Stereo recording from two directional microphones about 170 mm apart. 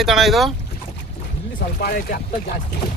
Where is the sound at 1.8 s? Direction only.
60° left (ahead or behind).